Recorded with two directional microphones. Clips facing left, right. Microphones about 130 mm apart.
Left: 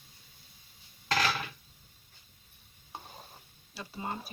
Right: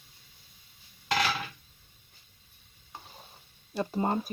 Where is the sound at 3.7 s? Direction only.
45° right (ahead or behind).